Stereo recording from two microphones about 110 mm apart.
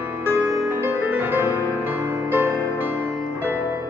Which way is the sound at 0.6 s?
15° right (ahead or behind).